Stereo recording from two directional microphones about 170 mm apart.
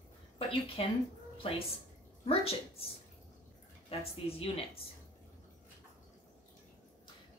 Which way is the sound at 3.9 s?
35° left (ahead or behind).